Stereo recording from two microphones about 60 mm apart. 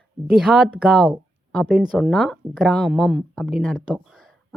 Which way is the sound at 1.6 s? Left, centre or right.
Centre.